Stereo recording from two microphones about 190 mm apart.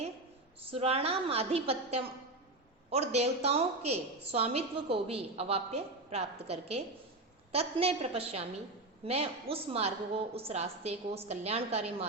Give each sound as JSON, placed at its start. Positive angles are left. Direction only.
{"t": 0.6, "sound": "a woman's voice", "side_deg": -30}